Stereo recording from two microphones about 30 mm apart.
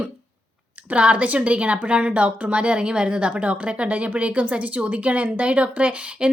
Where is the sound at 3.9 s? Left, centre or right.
Right.